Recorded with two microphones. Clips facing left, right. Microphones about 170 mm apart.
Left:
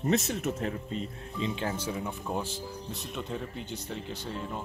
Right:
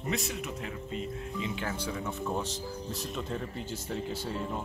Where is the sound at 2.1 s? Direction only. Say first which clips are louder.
Right 1 dB; 10° left (ahead or behind).